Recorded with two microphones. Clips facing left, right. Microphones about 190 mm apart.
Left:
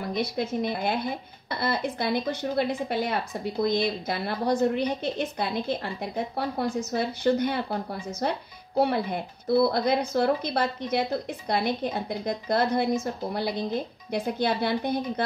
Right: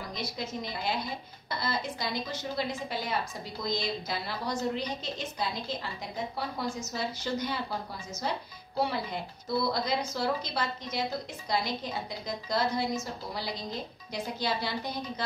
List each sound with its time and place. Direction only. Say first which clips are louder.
0.1 s speech: left 10 dB; 60° left (ahead or behind)